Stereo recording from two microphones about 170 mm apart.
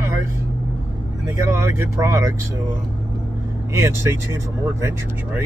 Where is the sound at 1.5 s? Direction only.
15° right (ahead or behind).